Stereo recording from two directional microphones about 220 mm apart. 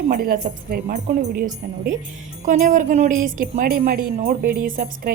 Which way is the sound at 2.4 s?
35° right (ahead or behind).